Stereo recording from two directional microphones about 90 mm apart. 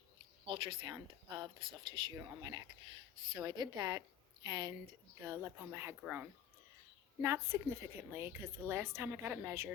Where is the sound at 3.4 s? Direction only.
50° right (ahead or behind).